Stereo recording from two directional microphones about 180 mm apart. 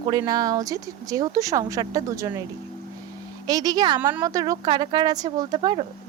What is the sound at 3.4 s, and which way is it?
Speech, 20° right (ahead or behind).